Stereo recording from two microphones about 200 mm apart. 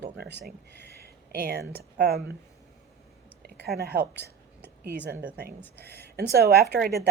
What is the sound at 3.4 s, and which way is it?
Speech, 55° right (ahead or behind).